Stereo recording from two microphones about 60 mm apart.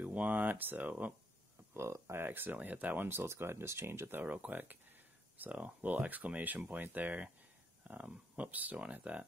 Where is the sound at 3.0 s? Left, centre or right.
Right.